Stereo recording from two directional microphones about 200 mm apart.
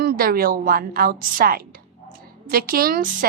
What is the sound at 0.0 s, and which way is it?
A woman's voice, 50° right (ahead or behind).